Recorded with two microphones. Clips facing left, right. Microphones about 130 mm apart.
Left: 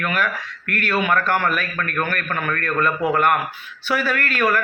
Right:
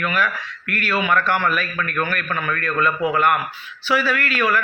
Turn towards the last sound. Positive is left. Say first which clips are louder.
# even
turn(degrees=45)  # may be behind; listen again after turning